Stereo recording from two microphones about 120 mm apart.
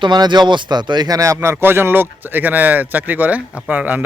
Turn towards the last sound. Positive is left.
turn(degrees=-15)  # may be behind; listen again after turning